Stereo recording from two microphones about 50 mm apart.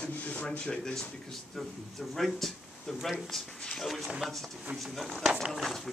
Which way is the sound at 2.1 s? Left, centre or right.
Centre.